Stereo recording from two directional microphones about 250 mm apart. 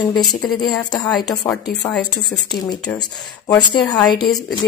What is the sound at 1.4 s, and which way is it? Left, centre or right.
Speech, centre.